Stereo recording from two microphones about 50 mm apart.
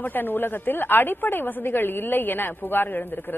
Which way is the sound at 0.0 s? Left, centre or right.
Left.